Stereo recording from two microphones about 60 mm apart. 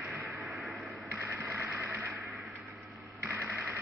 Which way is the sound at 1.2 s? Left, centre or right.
Right.